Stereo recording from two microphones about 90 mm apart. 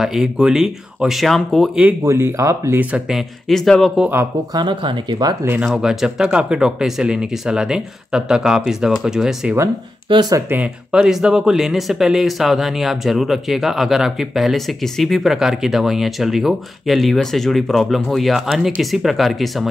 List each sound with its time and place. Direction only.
0.0 s speech: 5° right (ahead or behind)
2.0 s speech: 30° right (ahead or behind)
3.1 s speech: centre (ahead or behind)
4.6 s speech: 55° right (ahead or behind)
5.8 s speech: 5° right (ahead or behind)
10.1 s speech: 65° right (ahead or behind)
10.5 s speech: 15° right (ahead or behind)
11.0 s speech: 5° right (ahead or behind)